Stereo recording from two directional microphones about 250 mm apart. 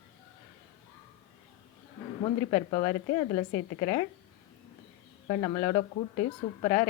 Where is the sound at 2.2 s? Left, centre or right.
Centre.